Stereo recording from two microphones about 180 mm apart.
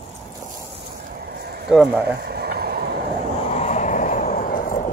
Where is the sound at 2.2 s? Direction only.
60° right (ahead or behind).